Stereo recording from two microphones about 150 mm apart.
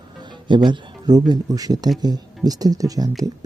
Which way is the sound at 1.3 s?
25° right (ahead or behind).